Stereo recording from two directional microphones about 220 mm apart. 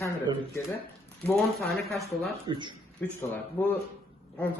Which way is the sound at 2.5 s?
20° right (ahead or behind).